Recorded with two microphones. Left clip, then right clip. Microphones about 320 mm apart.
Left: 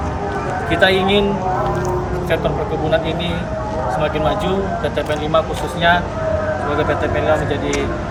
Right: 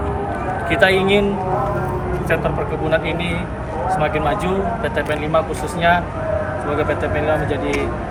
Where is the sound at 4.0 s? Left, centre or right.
Centre.